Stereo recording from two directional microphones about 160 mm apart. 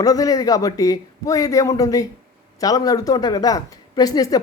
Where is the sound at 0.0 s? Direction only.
20° left (ahead or behind).